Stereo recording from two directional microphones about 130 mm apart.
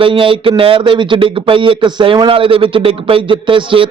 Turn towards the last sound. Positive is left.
turn(degrees=-40)  # may be behind; listen again after turning